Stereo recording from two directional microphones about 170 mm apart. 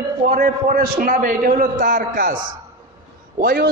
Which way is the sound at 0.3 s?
55° right (ahead or behind).